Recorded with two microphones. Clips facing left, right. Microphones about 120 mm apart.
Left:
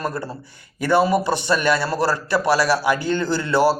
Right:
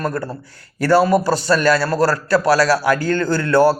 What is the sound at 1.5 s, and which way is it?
A man's voice, 20° left (ahead or behind).